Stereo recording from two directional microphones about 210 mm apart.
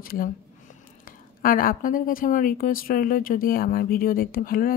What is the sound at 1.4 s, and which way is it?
A woman's voice, 40° left (ahead or behind).